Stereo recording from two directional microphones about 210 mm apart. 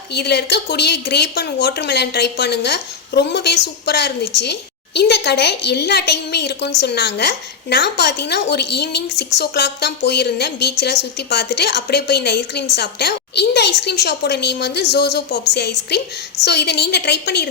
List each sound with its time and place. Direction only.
0.1 s a woman's voice: 50° left (ahead or behind)